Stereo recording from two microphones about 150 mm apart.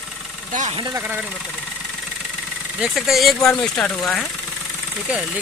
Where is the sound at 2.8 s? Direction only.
Centre (ahead or behind).